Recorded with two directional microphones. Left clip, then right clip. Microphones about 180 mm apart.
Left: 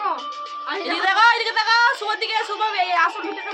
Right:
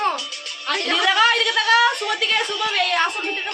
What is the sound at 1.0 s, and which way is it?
A woman's voice, 10° right (ahead or behind).